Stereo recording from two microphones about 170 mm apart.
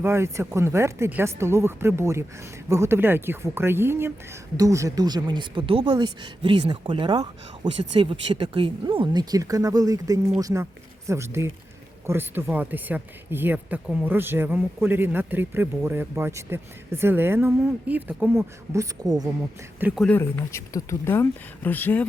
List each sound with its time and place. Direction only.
0.0 s speech: 15° right (ahead or behind)
20.1 s speech: 15° left (ahead or behind)